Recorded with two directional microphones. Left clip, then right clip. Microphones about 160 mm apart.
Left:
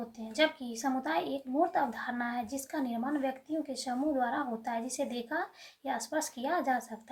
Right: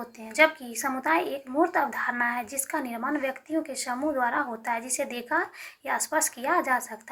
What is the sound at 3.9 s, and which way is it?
A woman's voice, 20° left (ahead or behind).